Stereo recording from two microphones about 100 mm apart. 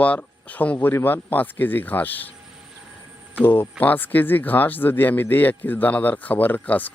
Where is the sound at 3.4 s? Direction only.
25° left (ahead or behind).